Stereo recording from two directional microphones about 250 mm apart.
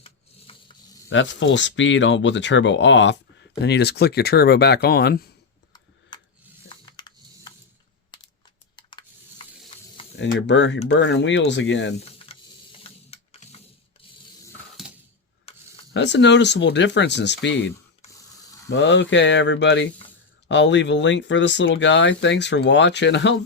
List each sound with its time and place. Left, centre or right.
0.5 s a sound: left
1.1 s speech: left
6.7 s typing: centre
8.7 s a sound: centre
9.7 s snake: centre
10.3 s speech: left
11.9 s mechanisms: left
15.5 s a sound: left
15.9 s speech: left